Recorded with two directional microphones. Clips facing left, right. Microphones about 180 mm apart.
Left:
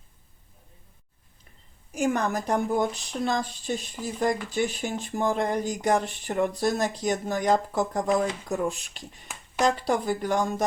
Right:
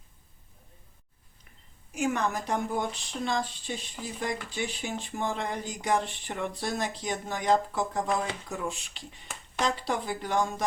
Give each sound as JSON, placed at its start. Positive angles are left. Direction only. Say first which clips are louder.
{"t": 1.9, "sound": "speech", "louder": "left 3 dB", "side_deg": 40}